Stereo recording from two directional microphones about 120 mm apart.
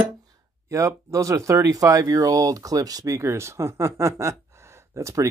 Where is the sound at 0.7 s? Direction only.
25° right (ahead or behind).